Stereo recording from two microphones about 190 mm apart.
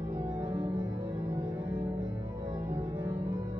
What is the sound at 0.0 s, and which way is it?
Music, 10° right (ahead or behind).